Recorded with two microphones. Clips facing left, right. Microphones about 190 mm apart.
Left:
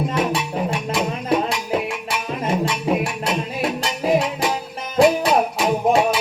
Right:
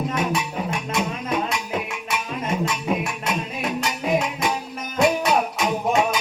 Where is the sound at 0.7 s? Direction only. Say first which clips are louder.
Left 3 dB; 30° left (ahead or behind).